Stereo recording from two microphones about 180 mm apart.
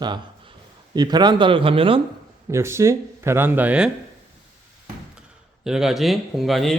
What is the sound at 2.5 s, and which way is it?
Speech, 15° right (ahead or behind).